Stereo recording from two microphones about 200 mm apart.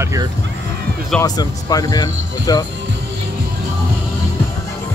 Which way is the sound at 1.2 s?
20° left (ahead or behind).